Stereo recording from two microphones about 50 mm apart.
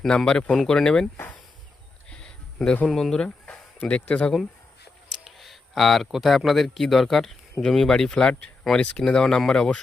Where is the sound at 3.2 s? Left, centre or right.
Left.